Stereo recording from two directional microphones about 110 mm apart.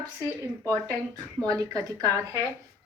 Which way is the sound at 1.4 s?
35° right (ahead or behind).